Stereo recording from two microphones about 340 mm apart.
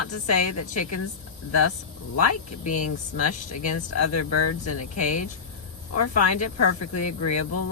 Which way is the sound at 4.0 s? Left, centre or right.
Left.